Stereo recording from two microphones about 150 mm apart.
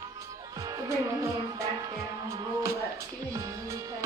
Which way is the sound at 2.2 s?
20° right (ahead or behind).